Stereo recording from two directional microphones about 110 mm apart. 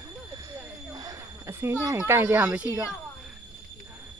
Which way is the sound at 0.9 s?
35° right (ahead or behind).